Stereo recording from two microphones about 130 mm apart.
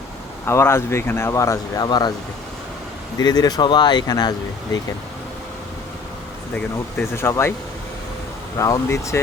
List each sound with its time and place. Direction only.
0.4 s speech: 20° left (ahead or behind)
3.2 s speech: 30° left (ahead or behind)
6.6 s speech: 20° left (ahead or behind)
8.5 s speech: 25° left (ahead or behind)